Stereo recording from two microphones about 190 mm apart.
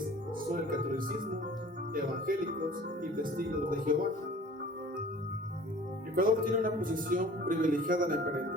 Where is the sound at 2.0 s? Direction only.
45° right (ahead or behind).